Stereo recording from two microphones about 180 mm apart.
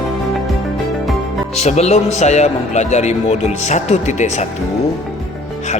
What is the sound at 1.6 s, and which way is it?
A man's voice, 35° left (ahead or behind).